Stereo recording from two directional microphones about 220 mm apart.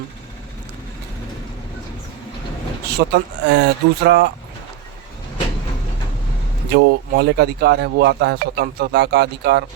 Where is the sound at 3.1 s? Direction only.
50° right (ahead or behind).